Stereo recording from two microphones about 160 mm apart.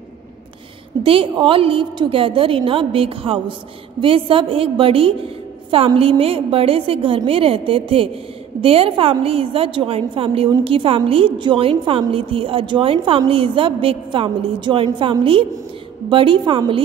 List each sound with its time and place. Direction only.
1.0 s a woman's voice: 35° right (ahead or behind)